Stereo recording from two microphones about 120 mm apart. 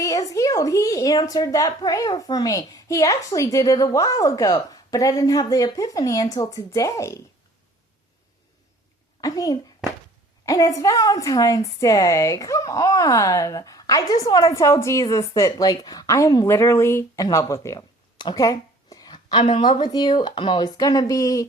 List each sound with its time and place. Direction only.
0.0 s speech: 30° left (ahead or behind)
9.2 s a child's voice: 30° left (ahead or behind)